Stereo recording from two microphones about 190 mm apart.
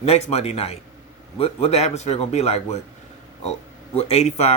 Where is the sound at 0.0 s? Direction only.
35° left (ahead or behind).